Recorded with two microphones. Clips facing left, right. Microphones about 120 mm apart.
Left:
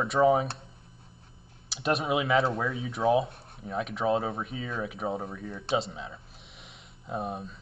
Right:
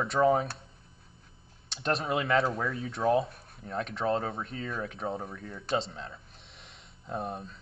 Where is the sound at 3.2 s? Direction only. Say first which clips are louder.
Left 2 dB; 25° left (ahead or behind).